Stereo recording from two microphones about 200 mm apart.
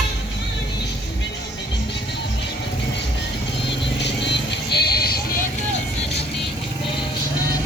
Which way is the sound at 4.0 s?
60° left (ahead or behind).